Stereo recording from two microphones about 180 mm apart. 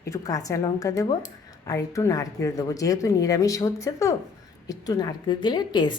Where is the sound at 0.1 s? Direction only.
20° left (ahead or behind).